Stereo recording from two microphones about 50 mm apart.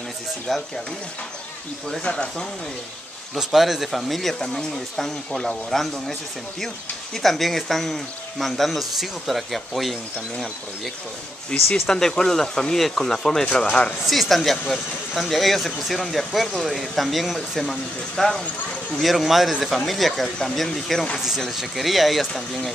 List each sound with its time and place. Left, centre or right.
0.5 s speech: centre
2.0 s speech: centre
3.3 s speech: centre
7.2 s speech: centre
11.5 s speech: centre
13.7 s speech: left
14.0 s speech: centre